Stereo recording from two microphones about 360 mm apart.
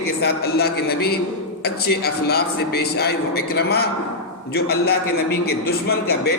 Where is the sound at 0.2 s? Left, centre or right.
Left.